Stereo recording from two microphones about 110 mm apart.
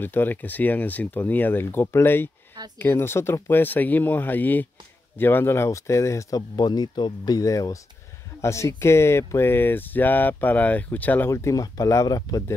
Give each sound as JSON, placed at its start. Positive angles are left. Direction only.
{"t": 0.0, "sound": "speech", "side_deg": 20}